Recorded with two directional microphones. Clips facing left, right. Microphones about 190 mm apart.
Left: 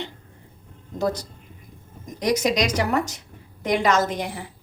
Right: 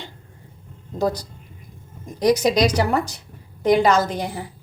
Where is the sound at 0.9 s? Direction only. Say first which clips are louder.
Right 2 dB; 35° right (ahead or behind).